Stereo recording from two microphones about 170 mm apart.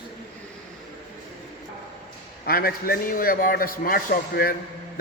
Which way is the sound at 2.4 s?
60° left (ahead or behind).